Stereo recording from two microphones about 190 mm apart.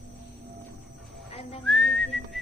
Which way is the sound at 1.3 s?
30° left (ahead or behind).